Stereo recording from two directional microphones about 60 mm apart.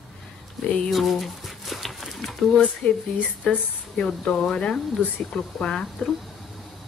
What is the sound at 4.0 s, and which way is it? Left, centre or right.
Speech, centre.